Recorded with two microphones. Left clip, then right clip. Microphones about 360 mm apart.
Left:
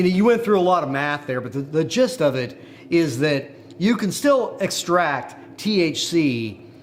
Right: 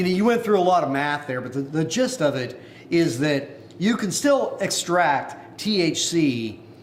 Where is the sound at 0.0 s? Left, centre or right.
Left.